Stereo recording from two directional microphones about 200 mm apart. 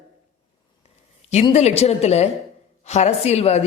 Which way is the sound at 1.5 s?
35° left (ahead or behind).